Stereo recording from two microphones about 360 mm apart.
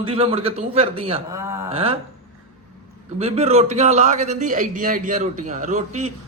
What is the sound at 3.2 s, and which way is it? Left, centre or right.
A man's voice, centre.